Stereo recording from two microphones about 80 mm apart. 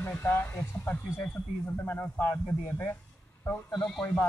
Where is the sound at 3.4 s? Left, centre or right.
Left.